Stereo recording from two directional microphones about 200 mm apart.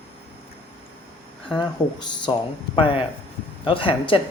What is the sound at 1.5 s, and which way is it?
Speech, 20° left (ahead or behind).